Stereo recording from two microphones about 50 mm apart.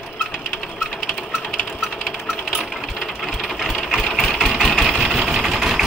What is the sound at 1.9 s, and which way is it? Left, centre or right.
Sewing machine, centre.